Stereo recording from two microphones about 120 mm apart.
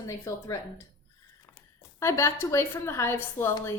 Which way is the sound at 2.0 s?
25° left (ahead or behind).